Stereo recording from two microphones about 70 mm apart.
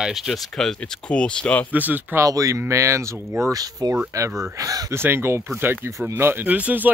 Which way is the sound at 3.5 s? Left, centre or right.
Right.